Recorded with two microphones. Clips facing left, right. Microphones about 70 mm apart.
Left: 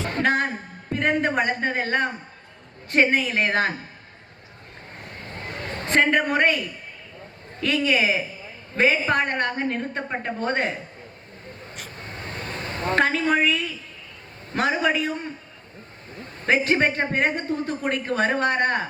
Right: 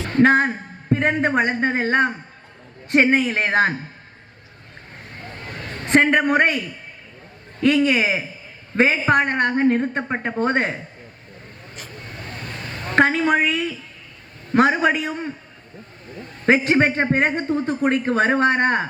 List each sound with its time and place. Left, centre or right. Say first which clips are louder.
0.2 s a man's voice: right 8 dB; right
5.9 s a man's voice: right 4 dB; right
7.6 s a woman's voice: right 5 dB; right
12.4 s a sound: left 4 dB; left
13.0 s a man's voice: right 4 dB; right
16.5 s a man's voice: right 4 dB; right